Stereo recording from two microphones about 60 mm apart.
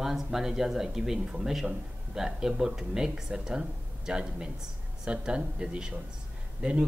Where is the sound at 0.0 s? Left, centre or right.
Centre.